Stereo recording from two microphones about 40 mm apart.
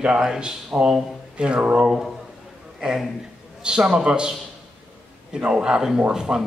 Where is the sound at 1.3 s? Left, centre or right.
Right.